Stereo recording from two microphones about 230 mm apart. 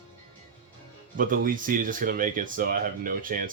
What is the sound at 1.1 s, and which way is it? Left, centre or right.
Speech, right.